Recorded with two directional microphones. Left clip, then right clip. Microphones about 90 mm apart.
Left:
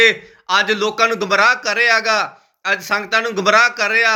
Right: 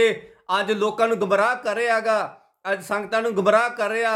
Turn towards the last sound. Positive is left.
turn(degrees=-30)  # may be behind; listen again after turning